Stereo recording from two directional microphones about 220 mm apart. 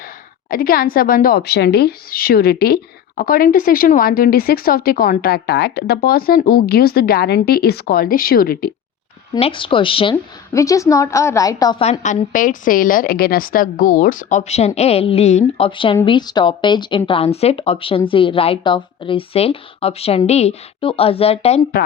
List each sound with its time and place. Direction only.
0.5 s a woman's voice: 40° left (ahead or behind)
9.3 s a woman's voice: 25° left (ahead or behind)
11.8 s a woman's voice: 30° left (ahead or behind)